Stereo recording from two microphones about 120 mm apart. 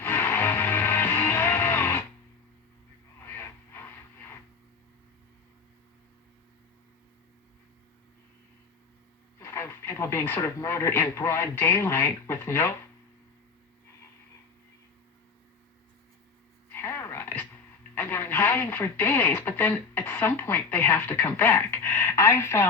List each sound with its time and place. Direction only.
0.0 s music: 20° left (ahead or behind)
3.2 s a sound: 20° left (ahead or behind)
9.4 s speech: 20° left (ahead or behind)
16.7 s speech: 20° left (ahead or behind)